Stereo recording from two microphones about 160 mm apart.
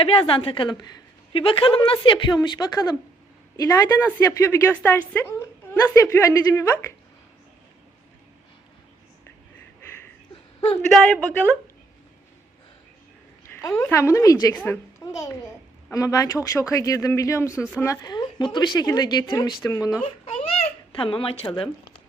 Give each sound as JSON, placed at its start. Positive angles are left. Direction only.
{"t": 0.0, "sound": "a woman's voice", "side_deg": 35}
{"t": 10.9, "sound": "a woman's voice", "side_deg": 5}
{"t": 13.5, "sound": "speech", "side_deg": 20}
{"t": 14.5, "sound": "a woman's voice", "side_deg": 10}
{"t": 15.0, "sound": "a woman's voice", "side_deg": 20}
{"t": 20.2, "sound": "babbling", "side_deg": 35}